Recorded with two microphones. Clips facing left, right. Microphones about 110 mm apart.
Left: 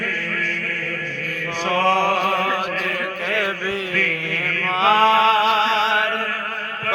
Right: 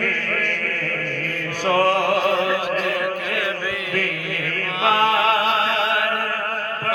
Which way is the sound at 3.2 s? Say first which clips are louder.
Left 1 dB; 30° left (ahead or behind).